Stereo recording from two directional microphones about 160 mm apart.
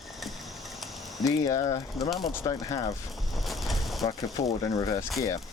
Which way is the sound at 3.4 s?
Centre (ahead or behind).